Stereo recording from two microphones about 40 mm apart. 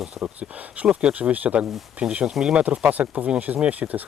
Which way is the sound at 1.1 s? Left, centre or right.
Right.